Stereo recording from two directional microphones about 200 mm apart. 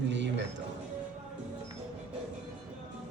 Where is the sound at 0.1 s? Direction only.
60° right (ahead or behind).